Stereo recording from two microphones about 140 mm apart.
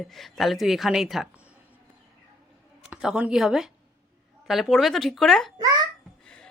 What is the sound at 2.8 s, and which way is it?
A woman's voice, 5° right (ahead or behind).